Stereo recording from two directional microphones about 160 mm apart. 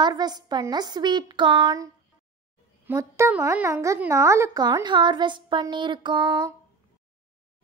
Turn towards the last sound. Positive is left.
turn(degrees=-25)  # may be behind; listen again after turning